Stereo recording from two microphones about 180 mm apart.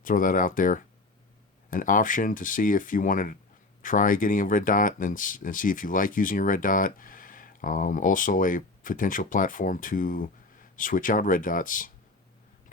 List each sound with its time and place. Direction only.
0.0 s speech: 50° left (ahead or behind)